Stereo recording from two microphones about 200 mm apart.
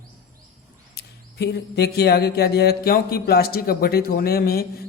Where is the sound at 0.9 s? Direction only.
55° left (ahead or behind).